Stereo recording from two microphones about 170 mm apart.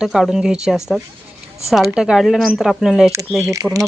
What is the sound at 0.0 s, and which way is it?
A woman's voice, centre (ahead or behind).